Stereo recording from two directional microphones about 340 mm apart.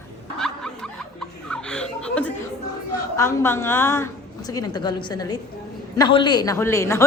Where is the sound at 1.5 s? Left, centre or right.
Centre.